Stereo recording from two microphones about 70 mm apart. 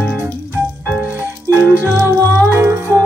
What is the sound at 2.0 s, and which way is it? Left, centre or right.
Music, right.